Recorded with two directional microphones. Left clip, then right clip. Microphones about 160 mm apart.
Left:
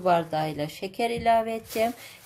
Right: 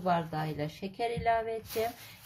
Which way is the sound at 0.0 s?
30° left (ahead or behind).